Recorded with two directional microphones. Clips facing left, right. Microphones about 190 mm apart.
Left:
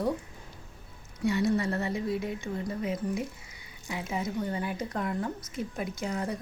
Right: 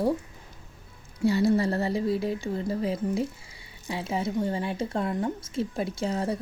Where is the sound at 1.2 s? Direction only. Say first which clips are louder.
Right 4 dB; 35° right (ahead or behind).